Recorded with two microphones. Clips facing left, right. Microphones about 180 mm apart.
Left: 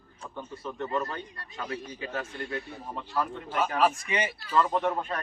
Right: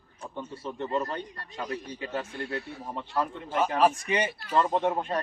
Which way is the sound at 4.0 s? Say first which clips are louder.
Right 2 dB; 35° right (ahead or behind).